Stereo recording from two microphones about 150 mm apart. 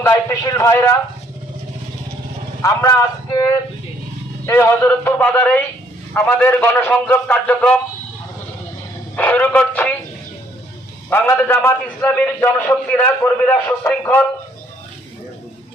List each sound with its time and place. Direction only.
0.1 s a man's voice: 25° left (ahead or behind)
2.6 s a man's voice: 20° left (ahead or behind)
9.1 s a sound: 10° left (ahead or behind)
11.1 s a man's voice: 15° left (ahead or behind)